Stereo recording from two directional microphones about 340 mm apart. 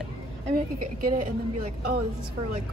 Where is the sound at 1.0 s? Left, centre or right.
Right.